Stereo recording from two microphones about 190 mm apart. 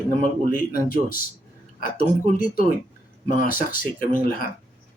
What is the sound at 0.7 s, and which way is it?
Speech, 50° left (ahead or behind).